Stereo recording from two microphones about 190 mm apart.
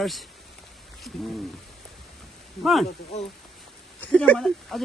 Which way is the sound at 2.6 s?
Centre (ahead or behind).